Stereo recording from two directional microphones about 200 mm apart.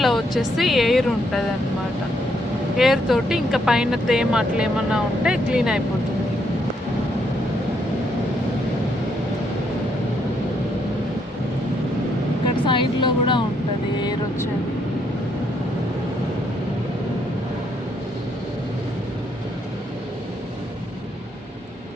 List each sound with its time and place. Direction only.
0.0 s speech: centre (ahead or behind)
2.7 s speech: centre (ahead or behind)
12.6 s speech: 25° left (ahead or behind)